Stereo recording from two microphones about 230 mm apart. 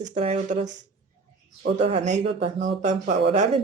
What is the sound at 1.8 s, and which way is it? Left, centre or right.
Speech, right.